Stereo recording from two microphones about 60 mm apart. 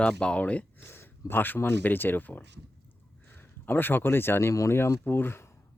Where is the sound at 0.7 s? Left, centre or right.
Left.